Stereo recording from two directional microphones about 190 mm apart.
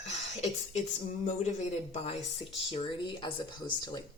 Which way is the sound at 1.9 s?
30° left (ahead or behind).